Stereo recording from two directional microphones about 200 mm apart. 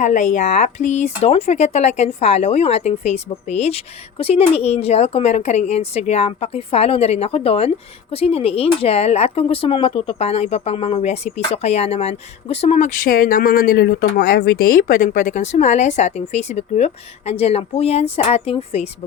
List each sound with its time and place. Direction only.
0.0 s speech: 35° left (ahead or behind)